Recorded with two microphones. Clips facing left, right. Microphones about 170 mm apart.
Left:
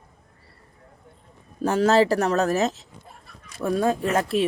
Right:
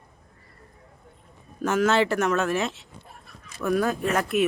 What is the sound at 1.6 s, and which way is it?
Speech, 30° left (ahead or behind).